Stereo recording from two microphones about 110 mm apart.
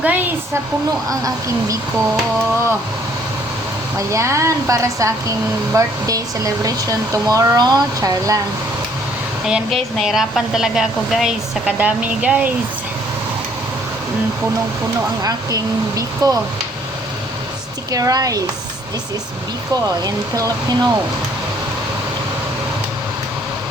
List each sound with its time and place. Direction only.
0.0 s a woman's voice: 15° right (ahead or behind)
1.2 s speech: 30° right (ahead or behind)
3.9 s speech: 25° right (ahead or behind)
9.6 s speech: centre (ahead or behind)
15.2 s speech: 35° right (ahead or behind)
17.9 s speech: 30° right (ahead or behind)
19.7 s speech: 30° right (ahead or behind)